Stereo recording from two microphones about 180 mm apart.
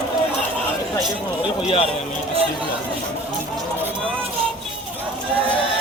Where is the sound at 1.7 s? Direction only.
35° left (ahead or behind).